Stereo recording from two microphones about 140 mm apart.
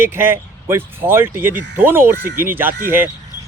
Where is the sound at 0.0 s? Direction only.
15° right (ahead or behind).